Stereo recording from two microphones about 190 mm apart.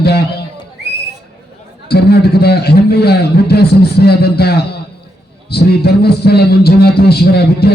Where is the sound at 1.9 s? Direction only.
55° left (ahead or behind).